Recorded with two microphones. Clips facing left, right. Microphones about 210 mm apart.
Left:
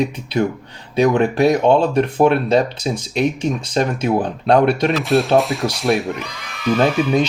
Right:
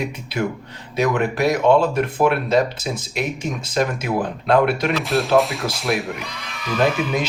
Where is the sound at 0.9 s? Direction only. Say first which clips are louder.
Left 5 dB; 30° left (ahead or behind).